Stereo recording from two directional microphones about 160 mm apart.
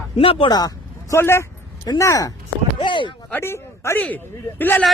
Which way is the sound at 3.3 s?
15° left (ahead or behind).